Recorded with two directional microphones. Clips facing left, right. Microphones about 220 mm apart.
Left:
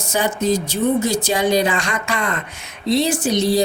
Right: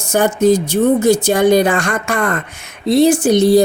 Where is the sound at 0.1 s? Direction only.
55° right (ahead or behind).